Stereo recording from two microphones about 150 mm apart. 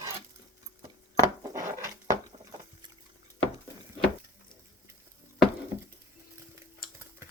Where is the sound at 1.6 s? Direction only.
25° right (ahead or behind).